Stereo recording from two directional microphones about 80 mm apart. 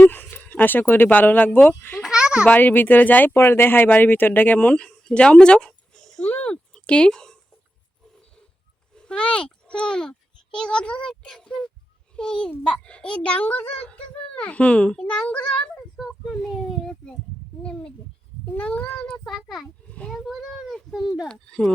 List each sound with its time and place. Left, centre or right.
0.0 s speech: left
1.5 s a child's voice: centre
2.0 s a sound: centre
2.5 s speech: left
9.0 s a child's voice: centre
16.0 s a child's voice: centre
17.6 s a child's voice: centre
19.0 s speech: centre
19.9 s a sound: centre
20.1 s speech: centre
21.2 s a child's voice: centre